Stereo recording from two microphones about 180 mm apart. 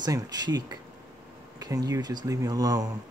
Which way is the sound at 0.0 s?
20° right (ahead or behind).